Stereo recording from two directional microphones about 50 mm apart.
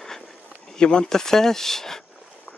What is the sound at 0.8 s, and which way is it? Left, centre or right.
Speech, centre.